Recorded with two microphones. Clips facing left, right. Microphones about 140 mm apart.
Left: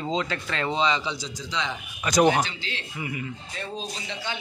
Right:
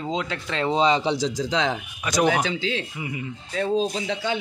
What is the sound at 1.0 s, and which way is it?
Speech, 75° right (ahead or behind).